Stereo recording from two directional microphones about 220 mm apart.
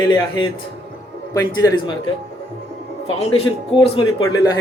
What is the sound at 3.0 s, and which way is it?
A man's voice, 25° left (ahead or behind).